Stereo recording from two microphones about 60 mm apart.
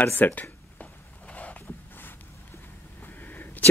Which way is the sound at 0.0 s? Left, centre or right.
Left.